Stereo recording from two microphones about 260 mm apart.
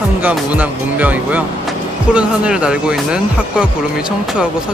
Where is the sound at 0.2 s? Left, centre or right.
Centre.